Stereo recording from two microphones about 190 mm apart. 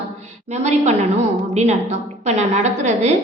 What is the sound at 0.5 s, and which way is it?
A woman's voice, 35° right (ahead or behind).